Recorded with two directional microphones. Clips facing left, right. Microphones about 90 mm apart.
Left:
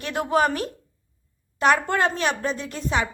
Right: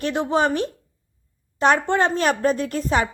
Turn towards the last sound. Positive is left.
turn(degrees=-45)  # may be behind; listen again after turning